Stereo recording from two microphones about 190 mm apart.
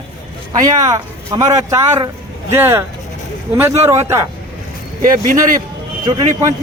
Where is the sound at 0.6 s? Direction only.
20° right (ahead or behind).